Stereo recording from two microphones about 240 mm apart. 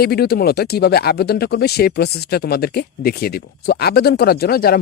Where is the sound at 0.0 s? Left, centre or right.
Left.